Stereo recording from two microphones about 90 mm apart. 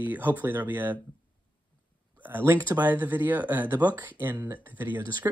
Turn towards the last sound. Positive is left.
turn(degrees=-20)  # may be behind; listen again after turning